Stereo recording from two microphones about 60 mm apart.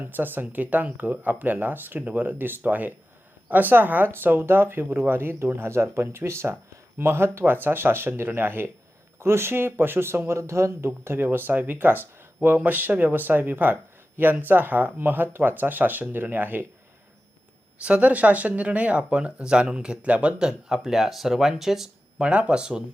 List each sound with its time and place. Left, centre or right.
0.0 s speech: right
17.8 s speech: right
20.4 s speech: centre
22.2 s speech: centre